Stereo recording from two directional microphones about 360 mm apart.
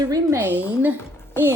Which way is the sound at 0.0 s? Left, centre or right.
Centre.